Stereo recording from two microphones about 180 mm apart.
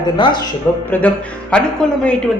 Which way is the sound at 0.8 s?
5° left (ahead or behind).